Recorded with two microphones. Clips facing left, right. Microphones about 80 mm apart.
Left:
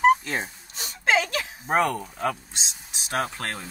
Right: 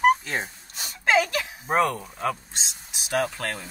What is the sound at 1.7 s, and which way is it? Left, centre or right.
Speech, left.